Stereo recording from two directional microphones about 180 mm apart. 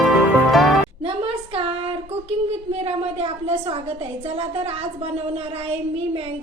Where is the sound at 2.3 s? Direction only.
35° right (ahead or behind).